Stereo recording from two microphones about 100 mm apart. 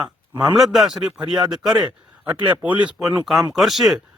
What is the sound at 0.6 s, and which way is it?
Speech, 5° right (ahead or behind).